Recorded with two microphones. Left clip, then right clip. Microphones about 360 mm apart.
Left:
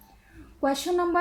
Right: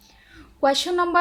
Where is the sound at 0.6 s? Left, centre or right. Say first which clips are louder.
Right 5 dB; right.